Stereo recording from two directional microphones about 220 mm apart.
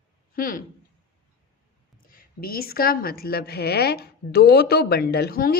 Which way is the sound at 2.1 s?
40° left (ahead or behind).